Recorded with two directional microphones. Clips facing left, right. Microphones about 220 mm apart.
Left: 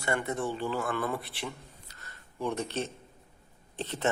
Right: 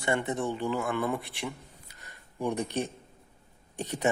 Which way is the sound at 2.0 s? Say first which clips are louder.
Right 2 dB; 15° right (ahead or behind).